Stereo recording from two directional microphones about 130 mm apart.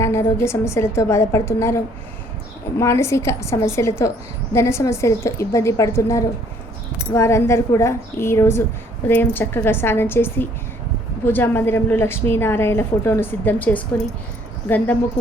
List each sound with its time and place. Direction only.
0.0 s a woman's voice: 20° left (ahead or behind)